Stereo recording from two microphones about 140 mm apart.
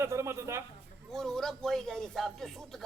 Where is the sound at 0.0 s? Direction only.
20° right (ahead or behind).